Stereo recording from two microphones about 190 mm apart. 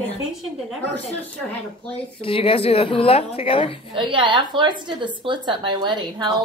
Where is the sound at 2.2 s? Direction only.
30° left (ahead or behind).